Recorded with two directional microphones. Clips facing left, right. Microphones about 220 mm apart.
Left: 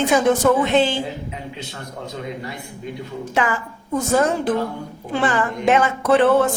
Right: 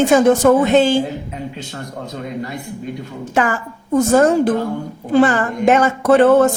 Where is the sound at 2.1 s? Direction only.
50° right (ahead or behind).